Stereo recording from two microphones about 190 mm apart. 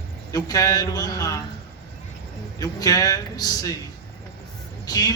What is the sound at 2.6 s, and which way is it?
A man's voice, 20° left (ahead or behind).